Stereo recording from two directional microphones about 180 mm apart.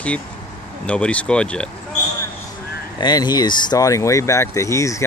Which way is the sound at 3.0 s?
25° left (ahead or behind).